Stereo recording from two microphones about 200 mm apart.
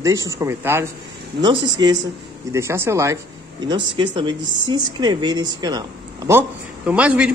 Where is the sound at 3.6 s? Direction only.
25° right (ahead or behind).